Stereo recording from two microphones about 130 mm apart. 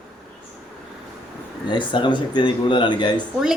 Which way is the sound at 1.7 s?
40° left (ahead or behind).